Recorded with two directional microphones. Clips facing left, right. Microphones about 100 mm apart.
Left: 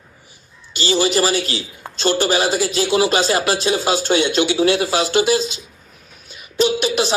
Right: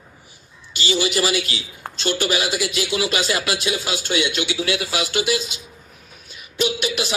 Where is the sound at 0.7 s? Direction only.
35° left (ahead or behind).